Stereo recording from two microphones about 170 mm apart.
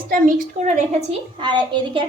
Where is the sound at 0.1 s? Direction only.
50° right (ahead or behind).